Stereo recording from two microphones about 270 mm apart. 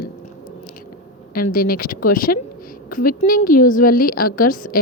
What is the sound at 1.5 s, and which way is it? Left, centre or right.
A woman's voice, left.